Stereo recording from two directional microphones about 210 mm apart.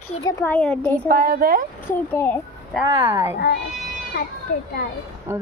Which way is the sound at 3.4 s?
50° left (ahead or behind).